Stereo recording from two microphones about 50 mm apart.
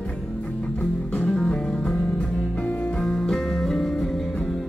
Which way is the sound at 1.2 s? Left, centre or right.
Centre.